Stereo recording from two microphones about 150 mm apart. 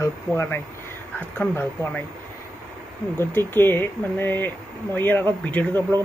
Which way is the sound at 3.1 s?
15° left (ahead or behind).